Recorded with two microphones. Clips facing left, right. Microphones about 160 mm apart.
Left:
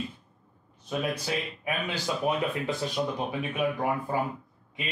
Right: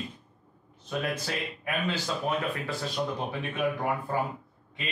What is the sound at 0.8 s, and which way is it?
Speech, 10° left (ahead or behind).